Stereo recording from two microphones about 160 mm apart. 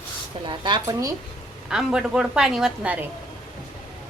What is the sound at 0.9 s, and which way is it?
Speech, 20° right (ahead or behind).